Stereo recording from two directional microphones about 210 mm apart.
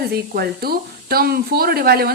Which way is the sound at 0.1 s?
45° right (ahead or behind).